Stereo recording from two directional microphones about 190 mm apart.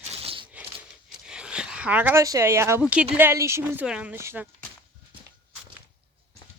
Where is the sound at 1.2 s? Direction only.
5° right (ahead or behind).